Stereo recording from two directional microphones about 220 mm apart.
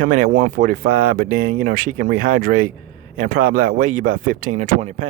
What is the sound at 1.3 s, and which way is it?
Speech, 80° right.